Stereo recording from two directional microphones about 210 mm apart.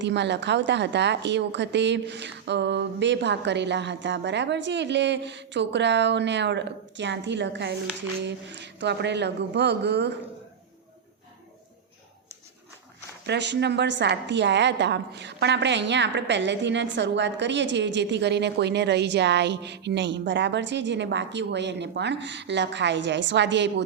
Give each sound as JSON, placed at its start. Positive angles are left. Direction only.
{"t": 0.0, "sound": "a woman's voice", "side_deg": -55}
{"t": 13.2, "sound": "a woman's voice", "side_deg": -55}